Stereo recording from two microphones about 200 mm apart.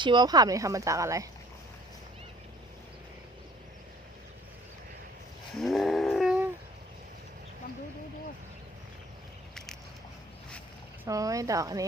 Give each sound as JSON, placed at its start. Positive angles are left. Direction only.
{"t": 0.0, "sound": "speech", "side_deg": -20}
{"t": 5.5, "sound": "a sound", "side_deg": 0}
{"t": 11.0, "sound": "speech", "side_deg": -15}